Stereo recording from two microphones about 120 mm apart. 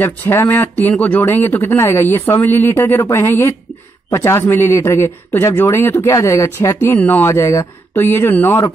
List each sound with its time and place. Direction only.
0.0 s speech: 20° left (ahead or behind)